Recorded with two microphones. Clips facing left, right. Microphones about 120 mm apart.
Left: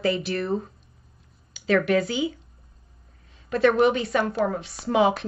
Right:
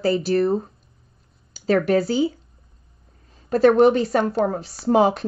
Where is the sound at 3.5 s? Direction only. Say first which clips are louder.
Right 5 dB; 40° right (ahead or behind).